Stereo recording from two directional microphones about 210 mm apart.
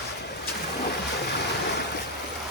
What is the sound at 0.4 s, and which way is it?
Ocean, 50° left (ahead or behind).